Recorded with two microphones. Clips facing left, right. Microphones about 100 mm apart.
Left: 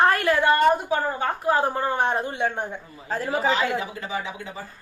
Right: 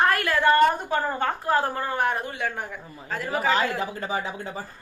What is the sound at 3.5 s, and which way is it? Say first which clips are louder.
A woman's voice: right 2 dB; 40° right (ahead or behind).